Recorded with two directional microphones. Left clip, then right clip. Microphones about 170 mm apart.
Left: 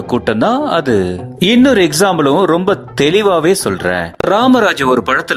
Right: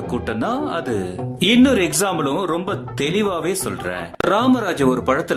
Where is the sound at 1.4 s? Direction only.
25° left (ahead or behind).